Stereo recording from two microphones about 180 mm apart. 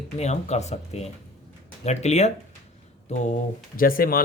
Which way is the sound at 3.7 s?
55° left (ahead or behind).